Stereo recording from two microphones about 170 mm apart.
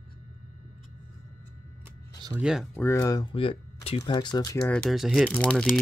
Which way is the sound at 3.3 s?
35° left (ahead or behind).